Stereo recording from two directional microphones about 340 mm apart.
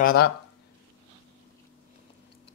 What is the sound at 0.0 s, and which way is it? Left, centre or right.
Speech, left.